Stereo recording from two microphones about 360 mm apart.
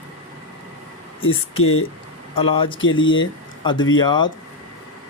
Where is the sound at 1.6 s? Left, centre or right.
Left.